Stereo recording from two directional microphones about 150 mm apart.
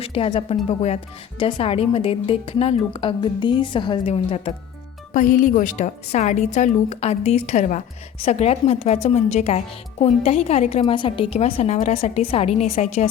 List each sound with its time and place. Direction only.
0.0 s a woman's voice: 40° left (ahead or behind)
1.4 s a woman's voice: 35° left (ahead or behind)
5.1 s speech: 60° left (ahead or behind)